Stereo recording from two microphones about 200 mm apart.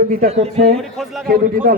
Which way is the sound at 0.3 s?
30° right (ahead or behind).